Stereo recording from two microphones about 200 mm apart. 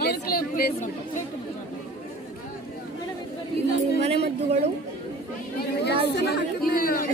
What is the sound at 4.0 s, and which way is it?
Speech, 30° right (ahead or behind).